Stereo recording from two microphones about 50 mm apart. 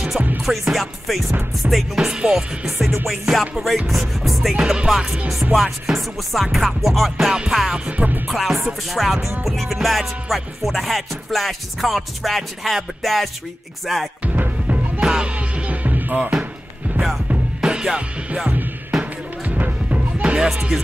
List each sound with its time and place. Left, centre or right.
0.5 s music: centre
2.0 s music: centre
3.1 s music: centre
4.6 s music: centre
7.7 s music: right
8.3 s music: centre
14.2 s music: right
15.0 s music: centre
15.3 s music: right
17.6 s music: centre; by 20.0 s right
20.2 s music: centre